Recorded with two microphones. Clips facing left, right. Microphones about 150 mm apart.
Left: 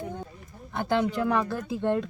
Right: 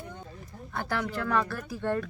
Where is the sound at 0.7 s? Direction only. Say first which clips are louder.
Left 6 dB; 20° left (ahead or behind).